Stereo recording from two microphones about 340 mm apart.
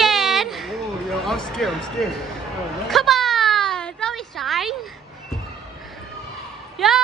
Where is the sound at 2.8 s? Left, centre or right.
Centre.